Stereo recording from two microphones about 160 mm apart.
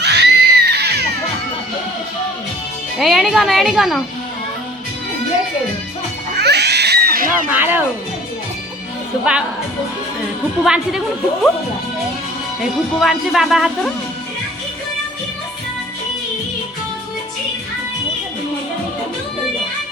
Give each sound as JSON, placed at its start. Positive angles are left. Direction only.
{"t": 0.0, "sound": "music", "side_deg": -90}
{"t": 3.0, "sound": "a woman's voice", "side_deg": 0}
{"t": 6.4, "sound": "cat", "side_deg": -90}
{"t": 7.5, "sound": "speech", "side_deg": -15}
{"t": 10.6, "sound": "a woman's voice", "side_deg": -5}
{"t": 13.0, "sound": "a woman's voice", "side_deg": 0}